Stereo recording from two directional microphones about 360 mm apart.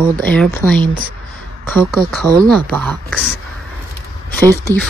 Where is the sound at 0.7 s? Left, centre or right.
Centre.